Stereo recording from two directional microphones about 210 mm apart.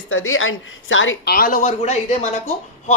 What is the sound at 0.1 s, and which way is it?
A woman's voice, 70° left (ahead or behind).